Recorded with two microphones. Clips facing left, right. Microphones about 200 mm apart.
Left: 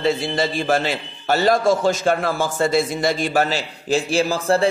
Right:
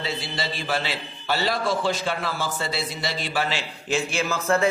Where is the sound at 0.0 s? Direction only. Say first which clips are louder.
Left 10 dB; 50° left (ahead or behind).